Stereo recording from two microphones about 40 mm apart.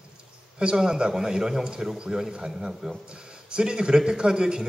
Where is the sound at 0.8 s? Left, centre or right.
Centre.